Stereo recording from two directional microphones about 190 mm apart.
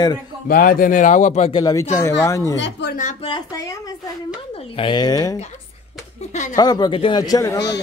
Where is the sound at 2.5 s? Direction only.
70° left (ahead or behind).